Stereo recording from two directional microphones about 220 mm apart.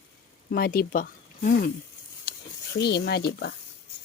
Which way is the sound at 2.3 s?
45° left (ahead or behind).